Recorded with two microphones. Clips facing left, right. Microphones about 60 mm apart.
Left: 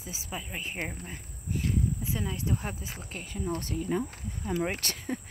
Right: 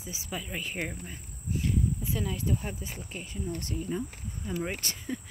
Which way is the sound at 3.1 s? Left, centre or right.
Left.